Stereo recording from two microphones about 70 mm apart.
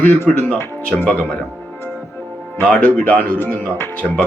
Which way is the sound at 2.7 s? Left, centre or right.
Centre.